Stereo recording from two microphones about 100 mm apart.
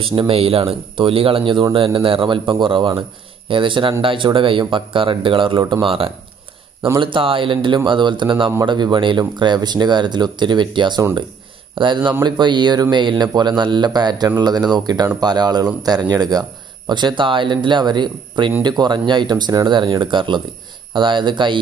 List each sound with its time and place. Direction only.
0.0 s speech: 60° right (ahead or behind); by 19.8 s 45° right (ahead or behind)
19.8 s speech: 55° right (ahead or behind)